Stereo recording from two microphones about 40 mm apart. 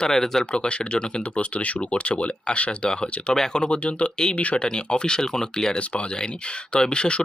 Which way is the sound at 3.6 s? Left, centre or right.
Left.